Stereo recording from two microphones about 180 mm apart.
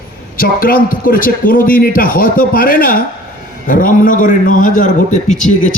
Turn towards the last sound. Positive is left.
turn(degrees=45)  # may be behind; listen again after turning